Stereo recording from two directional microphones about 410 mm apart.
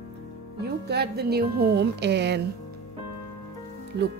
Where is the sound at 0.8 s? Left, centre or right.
Right.